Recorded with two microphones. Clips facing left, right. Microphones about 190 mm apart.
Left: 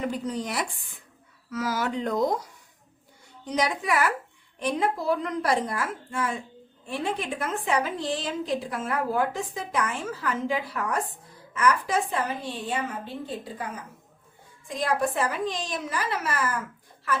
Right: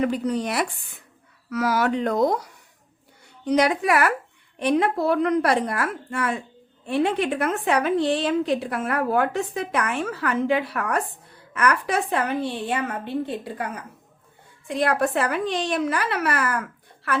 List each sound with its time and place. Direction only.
0.0 s a woman's voice: 65° right (ahead or behind)